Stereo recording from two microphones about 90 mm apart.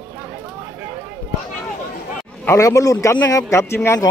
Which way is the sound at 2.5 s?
35° left (ahead or behind).